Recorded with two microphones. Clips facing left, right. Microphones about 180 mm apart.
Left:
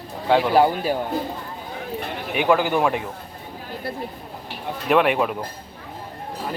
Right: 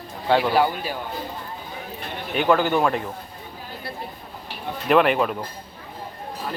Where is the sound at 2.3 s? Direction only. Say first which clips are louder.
Even; 5° left (ahead or behind).